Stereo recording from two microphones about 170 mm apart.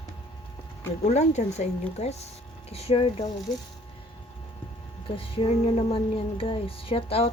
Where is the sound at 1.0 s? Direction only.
40° left (ahead or behind).